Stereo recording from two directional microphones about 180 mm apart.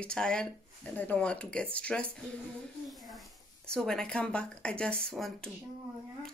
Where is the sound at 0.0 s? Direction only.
5° left (ahead or behind).